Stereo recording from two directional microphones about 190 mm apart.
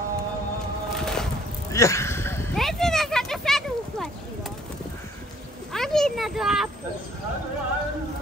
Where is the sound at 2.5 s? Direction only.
Centre (ahead or behind).